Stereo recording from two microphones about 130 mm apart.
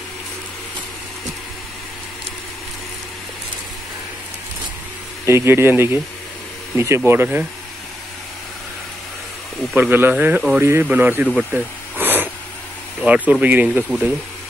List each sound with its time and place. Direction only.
5.2 s speech: 20° right (ahead or behind)
9.8 s speech: 15° right (ahead or behind)
11.3 s a sound: 10° right (ahead or behind)
13.0 s speech: 10° right (ahead or behind)